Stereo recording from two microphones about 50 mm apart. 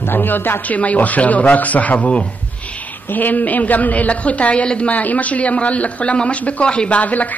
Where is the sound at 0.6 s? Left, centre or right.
Left.